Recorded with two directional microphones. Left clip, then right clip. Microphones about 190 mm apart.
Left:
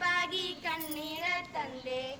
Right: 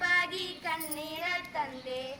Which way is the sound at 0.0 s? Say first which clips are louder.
Right 2 dB; 10° left (ahead or behind).